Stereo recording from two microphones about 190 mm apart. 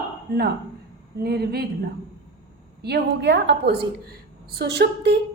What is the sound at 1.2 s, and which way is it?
Speech, 55° right (ahead or behind).